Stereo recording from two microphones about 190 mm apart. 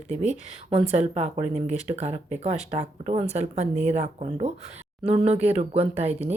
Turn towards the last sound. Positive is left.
turn(degrees=-35)  # may be behind; listen again after turning